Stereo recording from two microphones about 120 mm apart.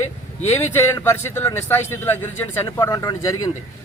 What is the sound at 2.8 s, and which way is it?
Speech, 30° left (ahead or behind).